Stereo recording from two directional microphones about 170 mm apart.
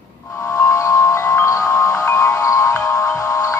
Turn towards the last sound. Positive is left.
turn(degrees=15)  # may be behind; listen again after turning